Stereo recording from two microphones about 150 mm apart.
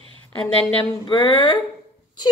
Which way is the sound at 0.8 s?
35° left (ahead or behind).